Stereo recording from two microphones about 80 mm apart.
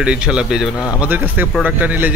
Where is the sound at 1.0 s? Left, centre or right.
Right.